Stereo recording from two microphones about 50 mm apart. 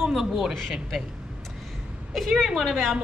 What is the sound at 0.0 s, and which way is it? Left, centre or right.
Speech, centre.